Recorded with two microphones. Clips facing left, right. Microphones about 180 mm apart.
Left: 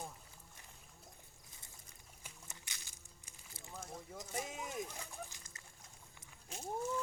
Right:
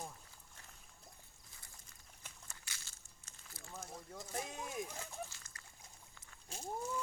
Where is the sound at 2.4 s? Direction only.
20° left (ahead or behind).